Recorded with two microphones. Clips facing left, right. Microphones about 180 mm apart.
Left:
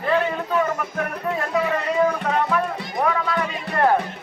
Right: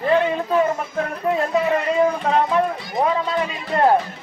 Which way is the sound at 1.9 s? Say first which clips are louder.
Even; 25° right (ahead or behind).